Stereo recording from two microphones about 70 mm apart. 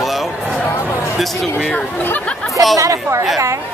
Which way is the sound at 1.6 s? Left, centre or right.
Centre.